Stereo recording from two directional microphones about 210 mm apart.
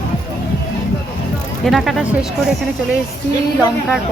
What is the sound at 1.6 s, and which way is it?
Speech, centre (ahead or behind).